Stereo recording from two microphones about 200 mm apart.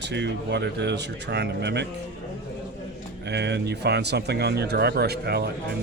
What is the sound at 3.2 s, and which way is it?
A man's voice, 60° right (ahead or behind).